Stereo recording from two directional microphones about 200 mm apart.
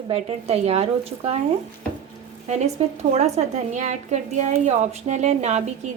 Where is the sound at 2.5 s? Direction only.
35° right (ahead or behind).